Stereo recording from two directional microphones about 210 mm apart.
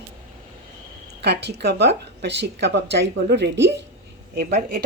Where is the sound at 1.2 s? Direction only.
50° right (ahead or behind).